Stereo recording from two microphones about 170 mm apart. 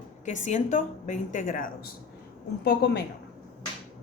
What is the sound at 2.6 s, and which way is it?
Speech, 75° left (ahead or behind).